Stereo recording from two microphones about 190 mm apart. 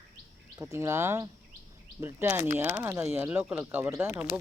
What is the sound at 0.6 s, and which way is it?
Speech, 15° right (ahead or behind).